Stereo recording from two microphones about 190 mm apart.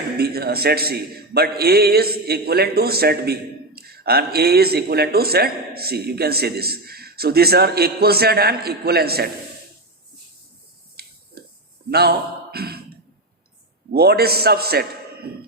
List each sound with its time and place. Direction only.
0.2 s speech: 55° right (ahead or behind)
11.0 s a sound: 55° right (ahead or behind)
13.9 s a man's voice: 55° right (ahead or behind)